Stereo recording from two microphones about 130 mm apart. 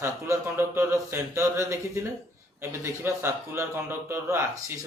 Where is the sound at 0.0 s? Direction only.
20° right (ahead or behind).